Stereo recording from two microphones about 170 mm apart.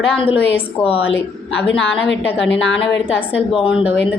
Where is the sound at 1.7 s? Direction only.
90° left.